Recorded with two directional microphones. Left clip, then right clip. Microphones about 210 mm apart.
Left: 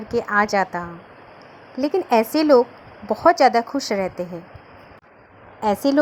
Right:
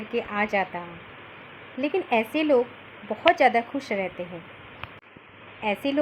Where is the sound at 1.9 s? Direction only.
25° left (ahead or behind).